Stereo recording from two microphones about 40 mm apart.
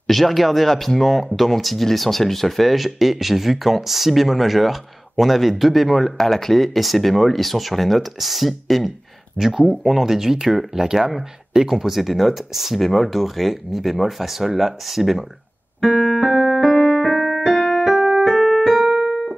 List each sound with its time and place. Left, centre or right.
0.0 s speech: centre
15.8 s keyboard: centre
16.6 s music: right
17.0 s music: centre
17.6 s keyboard: centre
17.8 s keyboard: centre
18.1 s keyboard: centre